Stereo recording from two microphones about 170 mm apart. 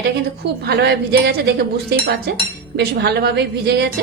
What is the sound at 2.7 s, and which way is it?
A woman's voice, 70° right (ahead or behind).